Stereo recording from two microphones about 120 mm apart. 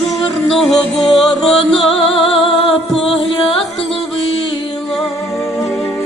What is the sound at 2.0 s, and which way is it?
Music, 50° left (ahead or behind).